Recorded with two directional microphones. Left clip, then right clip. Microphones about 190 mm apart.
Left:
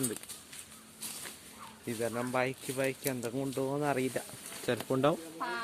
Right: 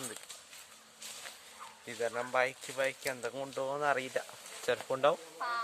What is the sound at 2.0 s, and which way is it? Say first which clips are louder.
Speech: right 1 dB; 10° right (ahead or behind).